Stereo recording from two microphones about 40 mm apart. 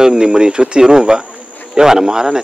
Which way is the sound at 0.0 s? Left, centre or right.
Centre.